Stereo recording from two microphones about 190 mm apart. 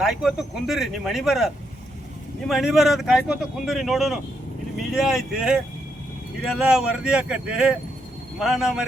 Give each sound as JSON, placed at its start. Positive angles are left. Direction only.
{"t": 0.0, "sound": "speech", "side_deg": 0}